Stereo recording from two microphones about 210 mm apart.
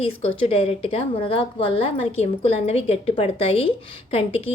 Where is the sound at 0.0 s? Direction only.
25° left (ahead or behind).